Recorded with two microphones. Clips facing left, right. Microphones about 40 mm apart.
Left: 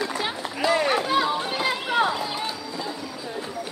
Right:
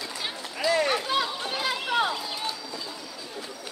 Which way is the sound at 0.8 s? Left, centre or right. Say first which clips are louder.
Left 4 dB; centre.